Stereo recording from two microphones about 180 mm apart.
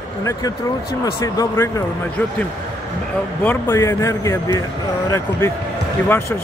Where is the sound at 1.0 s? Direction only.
20° left (ahead or behind).